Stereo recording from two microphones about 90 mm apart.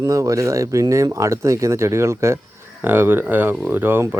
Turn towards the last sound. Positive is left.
turn(degrees=-25)  # may be behind; listen again after turning